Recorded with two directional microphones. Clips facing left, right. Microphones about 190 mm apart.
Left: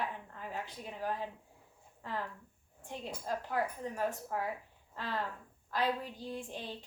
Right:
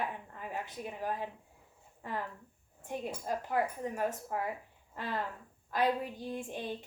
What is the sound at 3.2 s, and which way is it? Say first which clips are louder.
A woman's voice: right 2 dB; 15° right (ahead or behind).